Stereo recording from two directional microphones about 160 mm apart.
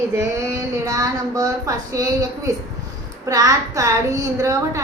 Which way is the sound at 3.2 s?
20° right (ahead or behind).